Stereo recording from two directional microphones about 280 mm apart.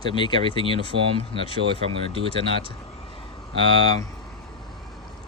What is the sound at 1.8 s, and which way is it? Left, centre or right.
Speech, right.